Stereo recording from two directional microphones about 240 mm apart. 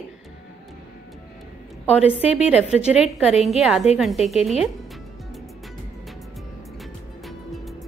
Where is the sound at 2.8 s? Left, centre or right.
Left.